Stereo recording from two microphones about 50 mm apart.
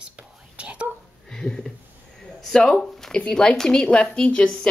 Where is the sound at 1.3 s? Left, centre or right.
Centre.